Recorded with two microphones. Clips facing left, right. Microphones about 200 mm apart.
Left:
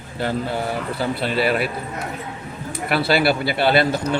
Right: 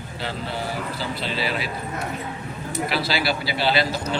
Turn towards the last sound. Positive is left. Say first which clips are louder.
# left 5 dB
turn(degrees=55)  # may be behind; listen again after turning